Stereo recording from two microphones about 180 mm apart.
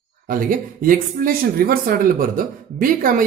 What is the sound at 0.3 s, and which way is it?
Speech, 50° right (ahead or behind).